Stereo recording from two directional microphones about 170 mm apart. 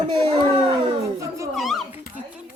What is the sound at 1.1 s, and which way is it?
Speech, 20° right (ahead or behind).